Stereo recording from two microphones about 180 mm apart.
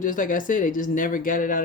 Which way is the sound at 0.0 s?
50° left (ahead or behind).